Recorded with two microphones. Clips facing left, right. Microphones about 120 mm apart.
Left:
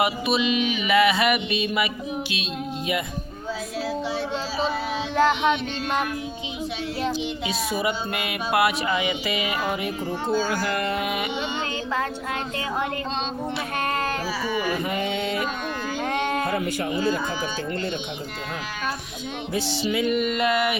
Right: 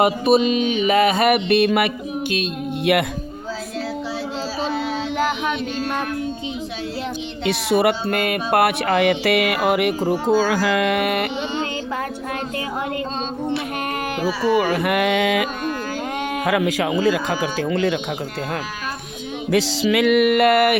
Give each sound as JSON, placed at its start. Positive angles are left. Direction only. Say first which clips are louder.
{"t": 0.0, "sound": "music", "louder": "right 7 dB", "side_deg": -45}
{"t": 7.4, "sound": "speech", "louder": "right 11 dB", "side_deg": -70}
{"t": 14.7, "sound": "speech", "louder": "right 7 dB", "side_deg": -85}
{"t": 19.5, "sound": "speech", "louder": "right 8 dB", "side_deg": -90}